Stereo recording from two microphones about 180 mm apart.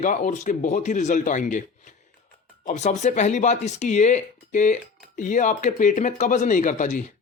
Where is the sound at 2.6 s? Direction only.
40° left (ahead or behind).